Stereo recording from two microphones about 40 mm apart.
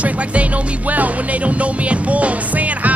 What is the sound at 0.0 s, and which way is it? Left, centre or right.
Music, right.